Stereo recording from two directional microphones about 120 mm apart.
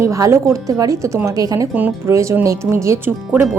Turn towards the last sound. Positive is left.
turn(degrees=-20)  # may be behind; listen again after turning